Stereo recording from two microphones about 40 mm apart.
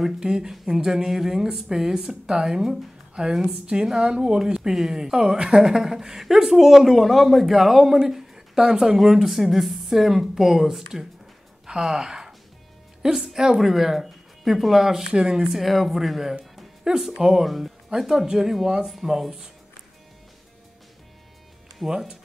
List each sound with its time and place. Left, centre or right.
0.2 s speech: centre
15.4 s speech: centre
21.8 s speech: centre